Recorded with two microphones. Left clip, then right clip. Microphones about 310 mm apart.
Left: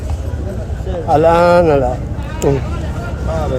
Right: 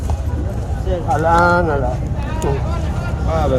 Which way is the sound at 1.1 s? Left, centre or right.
Left.